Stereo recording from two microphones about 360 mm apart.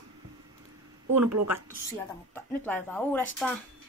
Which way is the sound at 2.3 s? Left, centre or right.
Centre.